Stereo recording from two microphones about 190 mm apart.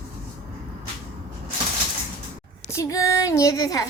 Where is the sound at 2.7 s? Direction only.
15° left (ahead or behind).